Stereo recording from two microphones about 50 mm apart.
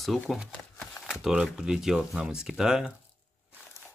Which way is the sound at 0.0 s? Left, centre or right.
Centre.